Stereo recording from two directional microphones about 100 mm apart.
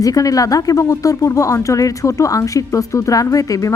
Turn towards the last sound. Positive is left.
turn(degrees=35)  # may be behind; listen again after turning